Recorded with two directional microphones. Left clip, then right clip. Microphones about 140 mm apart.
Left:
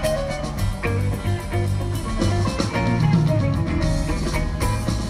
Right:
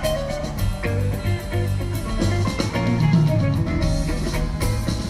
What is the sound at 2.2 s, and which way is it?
Music, 20° left (ahead or behind).